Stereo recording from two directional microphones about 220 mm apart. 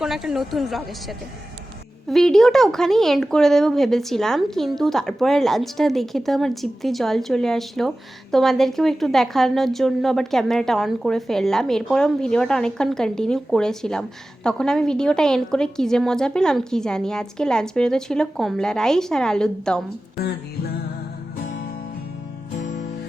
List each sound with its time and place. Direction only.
0.0 s speech: centre (ahead or behind)
20.1 s music: 45° left (ahead or behind)